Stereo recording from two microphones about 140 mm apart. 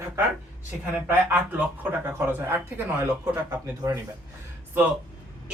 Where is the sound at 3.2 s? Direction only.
25° right (ahead or behind).